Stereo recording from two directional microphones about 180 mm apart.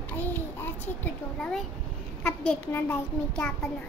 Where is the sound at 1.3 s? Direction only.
5° left (ahead or behind).